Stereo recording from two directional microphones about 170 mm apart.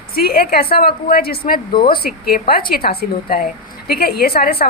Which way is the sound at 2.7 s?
60° left (ahead or behind).